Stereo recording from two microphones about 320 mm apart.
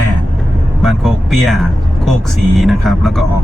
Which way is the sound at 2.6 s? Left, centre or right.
Centre.